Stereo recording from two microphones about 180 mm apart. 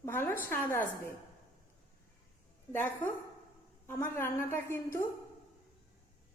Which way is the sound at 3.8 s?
10° left (ahead or behind).